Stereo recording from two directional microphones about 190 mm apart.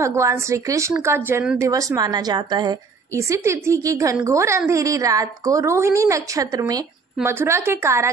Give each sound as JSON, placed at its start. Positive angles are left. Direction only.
{"t": 0.0, "sound": "a woman's voice", "side_deg": -15}